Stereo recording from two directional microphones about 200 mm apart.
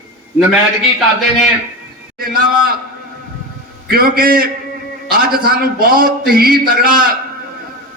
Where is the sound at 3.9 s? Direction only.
45° right (ahead or behind).